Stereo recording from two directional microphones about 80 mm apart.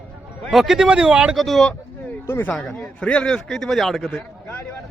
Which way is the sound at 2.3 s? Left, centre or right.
Left.